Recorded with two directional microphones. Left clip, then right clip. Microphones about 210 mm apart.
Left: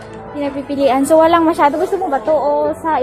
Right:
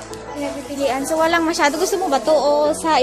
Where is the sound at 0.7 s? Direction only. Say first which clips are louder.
Left 8 dB; 40° left (ahead or behind).